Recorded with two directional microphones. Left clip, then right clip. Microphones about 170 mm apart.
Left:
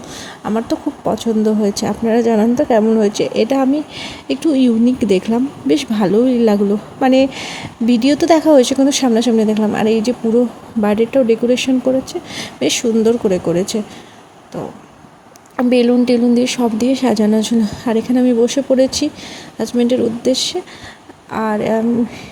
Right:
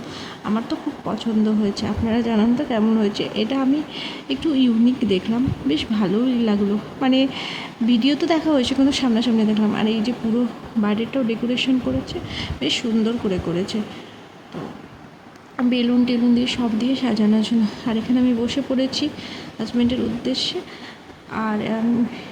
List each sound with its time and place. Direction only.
0.2 s speech: 35° left (ahead or behind)
15.5 s speech: 40° left (ahead or behind)